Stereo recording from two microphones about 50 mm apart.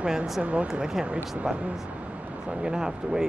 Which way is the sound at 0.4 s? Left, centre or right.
Right.